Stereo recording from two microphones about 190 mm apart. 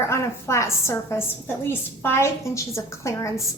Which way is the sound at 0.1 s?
15° left (ahead or behind).